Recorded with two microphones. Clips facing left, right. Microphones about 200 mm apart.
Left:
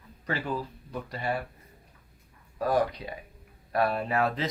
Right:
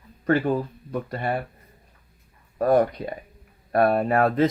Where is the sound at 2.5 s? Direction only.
55° right (ahead or behind).